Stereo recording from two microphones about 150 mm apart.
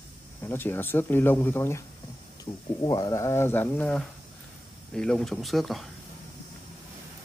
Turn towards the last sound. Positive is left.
turn(degrees=0)  # may be behind; listen again after turning